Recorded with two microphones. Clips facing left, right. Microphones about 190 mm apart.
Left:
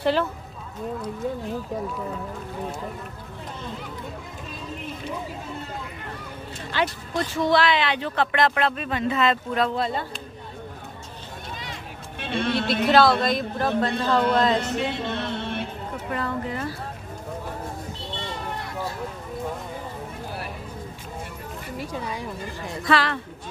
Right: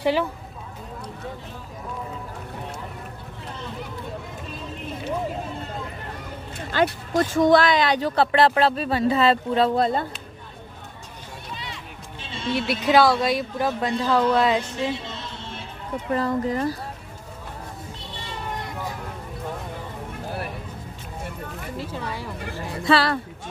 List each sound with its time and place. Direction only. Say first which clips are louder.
0.0 s speech: even; 15° right (ahead or behind)
6.7 s speech: right 5 dB; 45° right (ahead or behind)
9.8 s speech: right 5 dB; 40° right (ahead or behind)
12.2 s a sound: left 4 dB; 60° left (ahead or behind)
12.8 s speech: even; 10° right (ahead or behind)
14.6 s music: left 1 dB; 60° left (ahead or behind)
16.1 s speech: right 6 dB; 35° right (ahead or behind)
21.7 s speech: left 1 dB; 15° left (ahead or behind)
22.8 s speech: right 3 dB; 30° right (ahead or behind)